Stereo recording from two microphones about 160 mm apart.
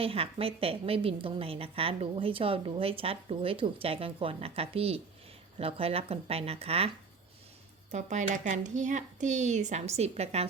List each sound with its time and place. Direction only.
0.0 s a woman's voice: 35° right (ahead or behind)
7.9 s speech: 50° right (ahead or behind)